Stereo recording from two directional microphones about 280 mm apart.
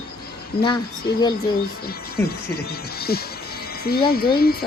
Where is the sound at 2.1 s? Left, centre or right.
Left.